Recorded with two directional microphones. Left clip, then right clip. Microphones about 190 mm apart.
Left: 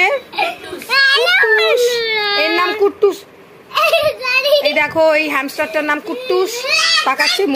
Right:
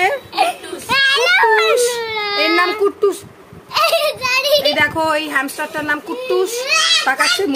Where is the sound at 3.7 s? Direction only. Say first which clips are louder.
Left 2 dB; 35° right (ahead or behind).